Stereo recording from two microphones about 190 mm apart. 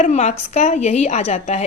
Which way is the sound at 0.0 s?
35° left (ahead or behind).